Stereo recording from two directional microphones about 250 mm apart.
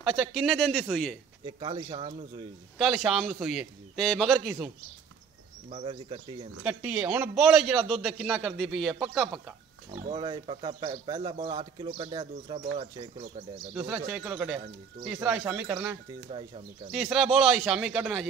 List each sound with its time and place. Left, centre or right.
0.0 s a man's voice: centre
1.4 s speech: centre
2.8 s a man's voice: centre
5.7 s speech: right
6.6 s a man's voice: centre
10.0 s speech: centre
13.6 s a man's voice: centre
16.3 s speech: right
16.9 s a man's voice: centre